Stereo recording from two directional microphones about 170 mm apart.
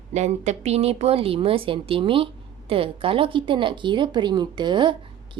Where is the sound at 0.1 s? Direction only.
40° right (ahead or behind).